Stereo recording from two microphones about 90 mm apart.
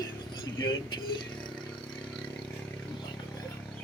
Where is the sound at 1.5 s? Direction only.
10° left (ahead or behind).